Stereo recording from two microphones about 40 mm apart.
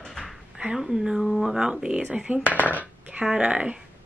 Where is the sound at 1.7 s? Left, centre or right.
Right.